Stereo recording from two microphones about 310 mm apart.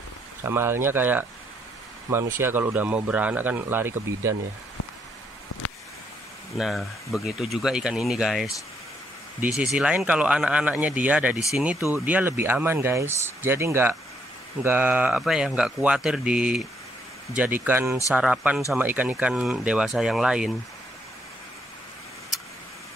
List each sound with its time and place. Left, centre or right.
0.4 s speech: centre
5.5 s a sound: left
6.6 s speech: centre